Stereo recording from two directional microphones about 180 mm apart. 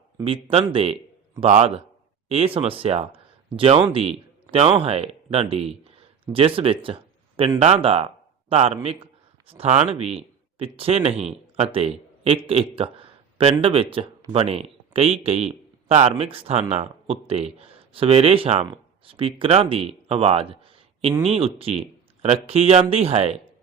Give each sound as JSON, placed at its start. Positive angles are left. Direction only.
{"t": 0.3, "sound": "a man's voice", "side_deg": -30}